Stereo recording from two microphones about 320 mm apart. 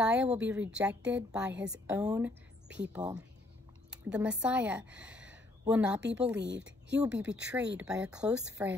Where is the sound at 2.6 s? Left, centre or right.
Right.